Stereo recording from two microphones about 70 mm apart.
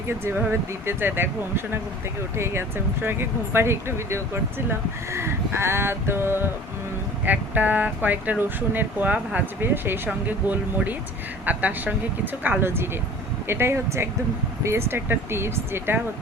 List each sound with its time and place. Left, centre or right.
0.9 s speech: right
7.3 s speech: right